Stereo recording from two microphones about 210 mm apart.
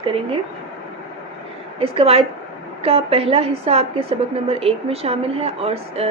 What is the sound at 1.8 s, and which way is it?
A woman's voice, 25° right (ahead or behind).